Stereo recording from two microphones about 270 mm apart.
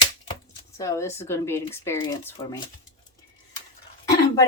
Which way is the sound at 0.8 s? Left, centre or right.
Centre.